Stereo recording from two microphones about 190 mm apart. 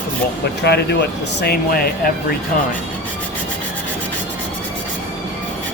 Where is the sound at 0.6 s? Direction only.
60° left (ahead or behind).